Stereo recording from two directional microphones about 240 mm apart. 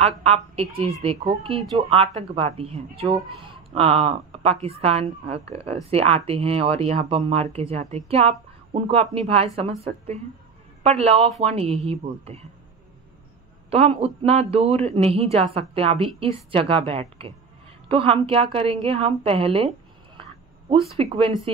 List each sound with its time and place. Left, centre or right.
0.0 s speech: right
13.7 s speech: right
20.9 s speech: right